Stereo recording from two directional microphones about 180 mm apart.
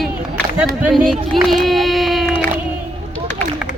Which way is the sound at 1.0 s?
Centre (ahead or behind).